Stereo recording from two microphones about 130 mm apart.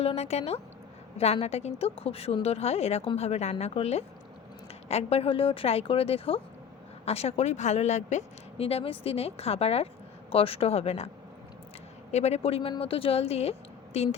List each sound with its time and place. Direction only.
0.0 s a woman's voice: 55° left (ahead or behind)
12.1 s speech: 55° left (ahead or behind)